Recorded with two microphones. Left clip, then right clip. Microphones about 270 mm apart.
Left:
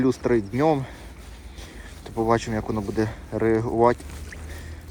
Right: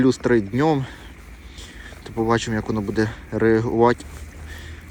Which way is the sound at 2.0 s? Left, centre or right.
Centre.